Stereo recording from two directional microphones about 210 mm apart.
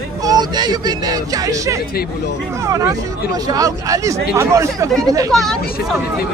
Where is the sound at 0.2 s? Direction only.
20° right (ahead or behind).